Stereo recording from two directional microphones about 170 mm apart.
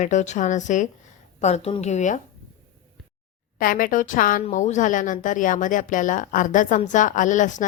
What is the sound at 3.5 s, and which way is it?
Speech, 55° left (ahead or behind).